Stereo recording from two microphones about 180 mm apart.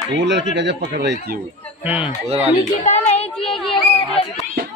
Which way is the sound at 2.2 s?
35° right (ahead or behind).